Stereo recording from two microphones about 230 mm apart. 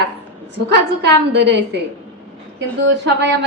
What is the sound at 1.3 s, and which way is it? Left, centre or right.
Speech, right.